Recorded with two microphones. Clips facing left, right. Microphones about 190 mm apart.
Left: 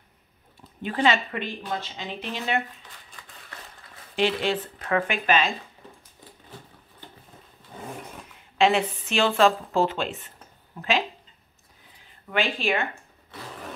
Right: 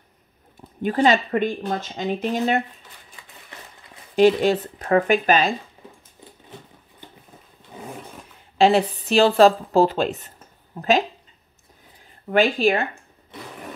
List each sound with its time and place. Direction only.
0.6 s speech: 40° right (ahead or behind)
4.1 s speech: 40° right (ahead or behind)
8.5 s a woman's voice: 35° right (ahead or behind)
12.3 s speech: 40° right (ahead or behind)